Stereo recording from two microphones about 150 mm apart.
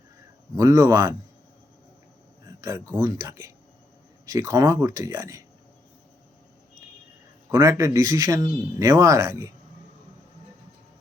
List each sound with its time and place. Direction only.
0.5 s a man's voice: 20° right (ahead or behind)
2.6 s a man's voice: 20° right (ahead or behind)
7.5 s a man's voice: 20° right (ahead or behind)